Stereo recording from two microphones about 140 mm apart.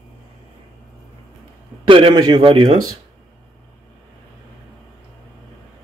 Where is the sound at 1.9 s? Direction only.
35° right (ahead or behind).